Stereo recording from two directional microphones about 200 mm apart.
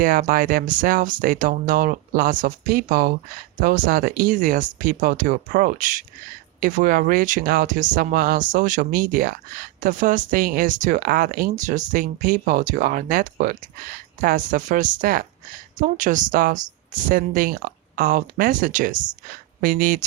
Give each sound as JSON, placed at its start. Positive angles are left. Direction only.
{"t": 0.0, "sound": "speech", "side_deg": -45}